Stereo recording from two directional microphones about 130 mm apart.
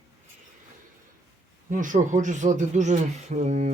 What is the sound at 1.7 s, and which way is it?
Speech, 80° right.